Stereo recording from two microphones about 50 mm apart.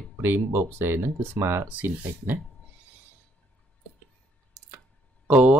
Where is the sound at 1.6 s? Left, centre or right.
Right.